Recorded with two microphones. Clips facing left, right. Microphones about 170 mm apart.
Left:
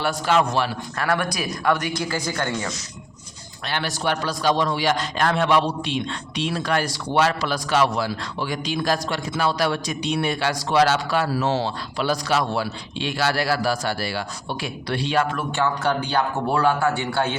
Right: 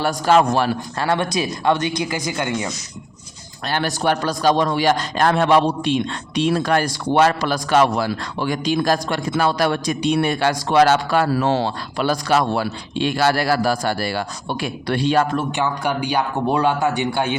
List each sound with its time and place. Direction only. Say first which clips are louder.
0.0 s a man's voice: right 5 dB; 40° right (ahead or behind)
0.9 s speech: right 2 dB; 30° right (ahead or behind)
3.7 s a man's voice: right 5 dB; 45° right (ahead or behind)
15.5 s speech: right 1 dB; 10° right (ahead or behind)